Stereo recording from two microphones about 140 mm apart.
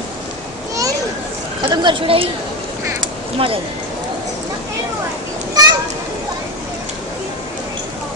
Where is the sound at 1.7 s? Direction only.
30° right (ahead or behind).